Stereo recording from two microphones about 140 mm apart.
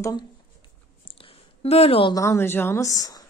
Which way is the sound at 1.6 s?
45° left (ahead or behind).